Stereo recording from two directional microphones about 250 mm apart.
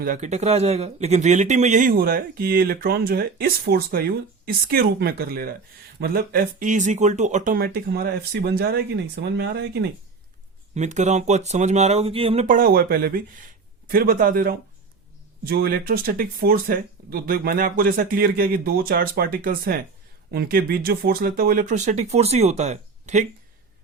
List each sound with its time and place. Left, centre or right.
0.0 s speech: right
10.8 s speech: right